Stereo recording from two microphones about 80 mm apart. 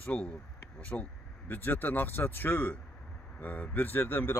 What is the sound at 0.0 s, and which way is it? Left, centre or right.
A man's voice, centre.